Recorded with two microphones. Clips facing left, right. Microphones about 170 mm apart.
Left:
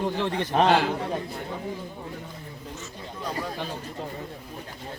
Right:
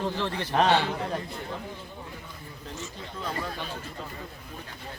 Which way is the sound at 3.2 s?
15° left (ahead or behind).